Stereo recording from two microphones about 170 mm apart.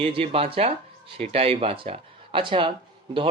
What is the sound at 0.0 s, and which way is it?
A man's voice, 35° right (ahead or behind).